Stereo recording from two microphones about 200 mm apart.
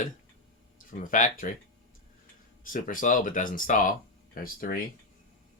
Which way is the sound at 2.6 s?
40° left (ahead or behind).